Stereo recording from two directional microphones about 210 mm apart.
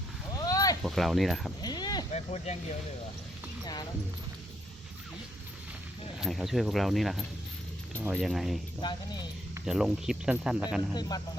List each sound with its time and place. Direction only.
0.3 s a sound: 15° left (ahead or behind)
0.8 s speech: centre (ahead or behind)
1.6 s a sound: 20° left (ahead or behind)
2.1 s speech: 30° left (ahead or behind)
6.1 s speech: centre (ahead or behind)
9.6 s speech: centre (ahead or behind)